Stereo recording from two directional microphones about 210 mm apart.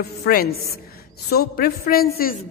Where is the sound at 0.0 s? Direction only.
45° left (ahead or behind).